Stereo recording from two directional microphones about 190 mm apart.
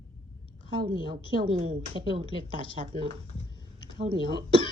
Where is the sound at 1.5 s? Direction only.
30° right (ahead or behind).